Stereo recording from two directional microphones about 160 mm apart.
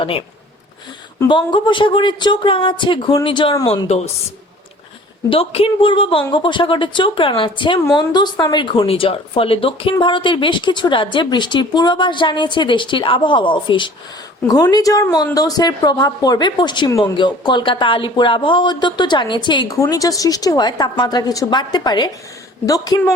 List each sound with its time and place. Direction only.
0.0 s speech: 35° left (ahead or behind)
1.3 s speech: 30° left (ahead or behind)
3.8 s a woman's voice: 45° left (ahead or behind)
5.3 s a woman's voice: 35° left (ahead or behind)